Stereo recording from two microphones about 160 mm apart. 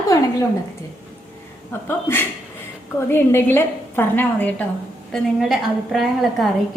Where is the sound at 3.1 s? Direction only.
15° left (ahead or behind).